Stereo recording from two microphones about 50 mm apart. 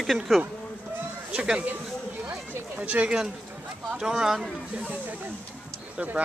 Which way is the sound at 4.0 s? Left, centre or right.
Centre.